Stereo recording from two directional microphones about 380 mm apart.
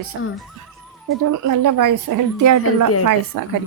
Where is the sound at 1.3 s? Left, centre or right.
Right.